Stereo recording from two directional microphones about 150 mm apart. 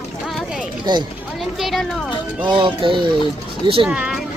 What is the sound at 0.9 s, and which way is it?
Speech, 30° right (ahead or behind).